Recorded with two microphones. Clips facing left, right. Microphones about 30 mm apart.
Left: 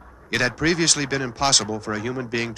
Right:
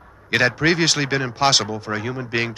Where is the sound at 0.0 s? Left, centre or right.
Centre.